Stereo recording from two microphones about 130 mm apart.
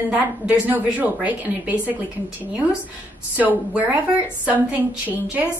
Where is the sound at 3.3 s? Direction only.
10° right (ahead or behind).